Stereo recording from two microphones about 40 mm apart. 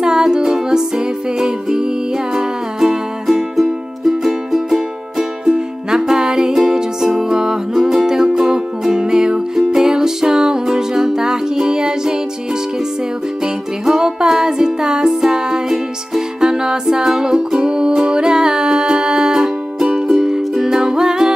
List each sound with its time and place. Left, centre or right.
0.0 s music: centre
13.4 s music: centre